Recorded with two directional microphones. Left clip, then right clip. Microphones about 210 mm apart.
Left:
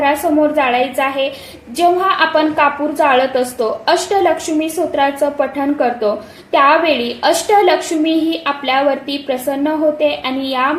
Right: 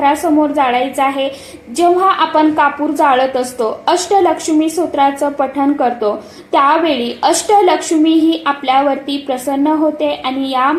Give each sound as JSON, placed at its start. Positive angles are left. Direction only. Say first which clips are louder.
{"t": 0.0, "sound": "a woman's voice", "louder": "right 1 dB", "side_deg": -25}